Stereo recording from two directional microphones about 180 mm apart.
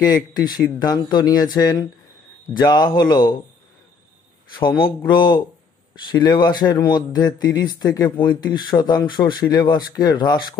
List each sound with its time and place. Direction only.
0.0 s speech: 25° left (ahead or behind)
4.6 s speech: 25° left (ahead or behind)